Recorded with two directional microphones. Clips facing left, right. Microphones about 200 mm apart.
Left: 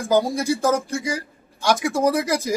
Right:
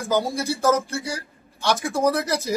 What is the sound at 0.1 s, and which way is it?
Speech, 10° left (ahead or behind).